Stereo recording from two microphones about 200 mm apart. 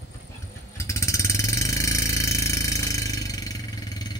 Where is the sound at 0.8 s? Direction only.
15° left (ahead or behind).